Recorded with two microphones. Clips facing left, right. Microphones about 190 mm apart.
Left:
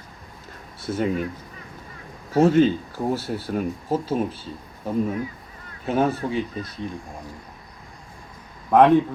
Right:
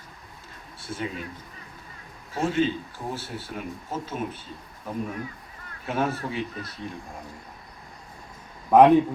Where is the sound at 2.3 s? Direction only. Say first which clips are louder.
Left 8 dB; 40° left (ahead or behind).